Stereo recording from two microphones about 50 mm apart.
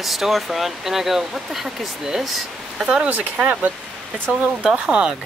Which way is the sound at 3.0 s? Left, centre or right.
Right.